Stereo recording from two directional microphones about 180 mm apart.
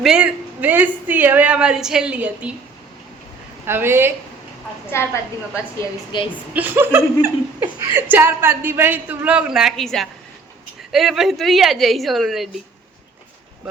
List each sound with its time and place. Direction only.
0.0 s a woman's voice: 5° right (ahead or behind)
3.7 s a woman's voice: 15° right (ahead or behind)
4.9 s a woman's voice: 15° left (ahead or behind)
6.1 s a woman's voice: 25° left (ahead or behind)
6.5 s a woman's voice: 10° right (ahead or behind)